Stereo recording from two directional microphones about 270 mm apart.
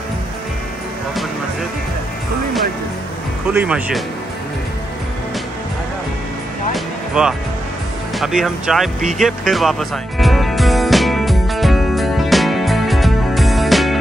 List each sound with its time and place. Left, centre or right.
3.5 s speech: centre
6.7 s music: centre